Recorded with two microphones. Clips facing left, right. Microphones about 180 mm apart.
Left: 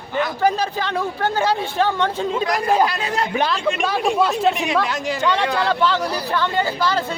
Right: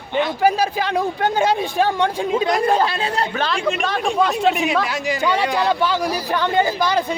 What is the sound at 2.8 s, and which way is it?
Speech, 30° right (ahead or behind).